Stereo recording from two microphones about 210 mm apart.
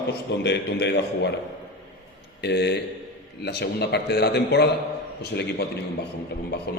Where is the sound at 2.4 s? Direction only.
50° left (ahead or behind).